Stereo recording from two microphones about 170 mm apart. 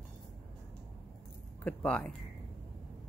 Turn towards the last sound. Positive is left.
turn(degrees=5)  # may be behind; listen again after turning